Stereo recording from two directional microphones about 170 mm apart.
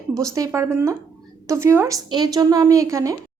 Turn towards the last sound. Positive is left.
turn(degrees=-20)  # may be behind; listen again after turning